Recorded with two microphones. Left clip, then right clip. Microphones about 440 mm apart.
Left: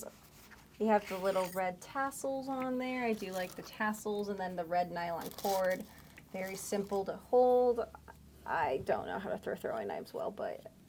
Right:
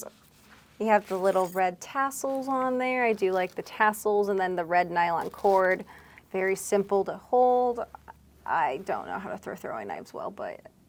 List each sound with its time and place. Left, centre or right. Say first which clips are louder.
0.8 s a woman's voice: right 7 dB; right
7.5 s speech: right 4 dB; right